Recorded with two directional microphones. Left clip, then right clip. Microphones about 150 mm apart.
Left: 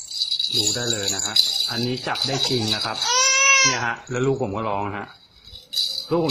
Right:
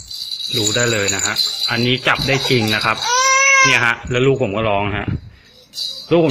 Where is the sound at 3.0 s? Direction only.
30° right (ahead or behind).